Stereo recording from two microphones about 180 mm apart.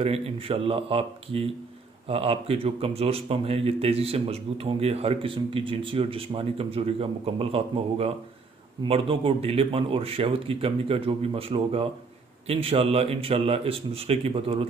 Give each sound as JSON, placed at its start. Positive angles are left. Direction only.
{"t": 0.0, "sound": "speech", "side_deg": -30}